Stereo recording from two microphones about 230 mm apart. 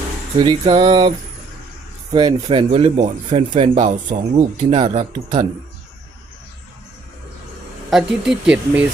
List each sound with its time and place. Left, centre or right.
0.3 s speech: right
2.1 s speech: right
7.9 s speech: centre